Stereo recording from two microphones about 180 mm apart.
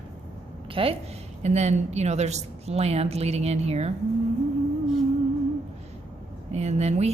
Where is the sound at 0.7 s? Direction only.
30° right (ahead or behind).